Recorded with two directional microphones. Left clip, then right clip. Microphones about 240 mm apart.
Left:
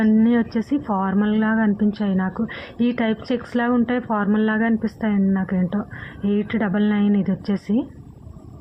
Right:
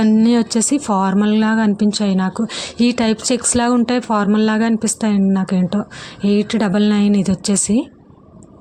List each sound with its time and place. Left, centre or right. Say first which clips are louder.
0.0 s speech: right 4 dB; right